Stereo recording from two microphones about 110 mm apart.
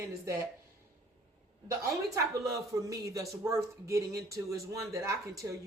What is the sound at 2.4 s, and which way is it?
A man's voice, 30° right (ahead or behind).